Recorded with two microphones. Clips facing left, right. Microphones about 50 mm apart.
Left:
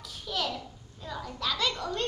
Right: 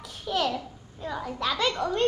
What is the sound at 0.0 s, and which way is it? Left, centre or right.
Babbling, right.